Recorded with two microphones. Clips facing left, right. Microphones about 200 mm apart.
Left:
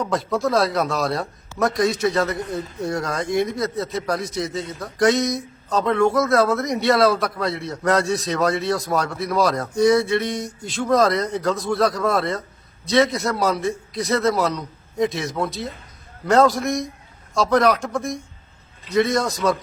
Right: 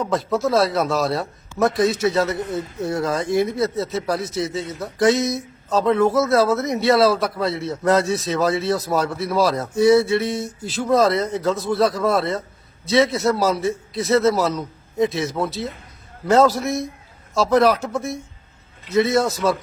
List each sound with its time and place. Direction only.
0.0 s a man's voice: centre (ahead or behind)